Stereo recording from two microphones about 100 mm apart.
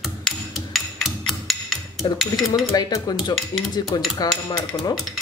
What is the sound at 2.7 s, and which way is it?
Speech, 40° left (ahead or behind).